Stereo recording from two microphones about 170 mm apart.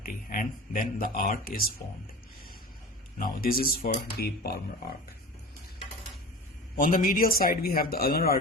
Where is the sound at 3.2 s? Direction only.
60° left (ahead or behind).